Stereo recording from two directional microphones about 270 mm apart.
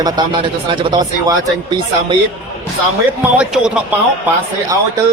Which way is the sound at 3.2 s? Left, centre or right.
Centre.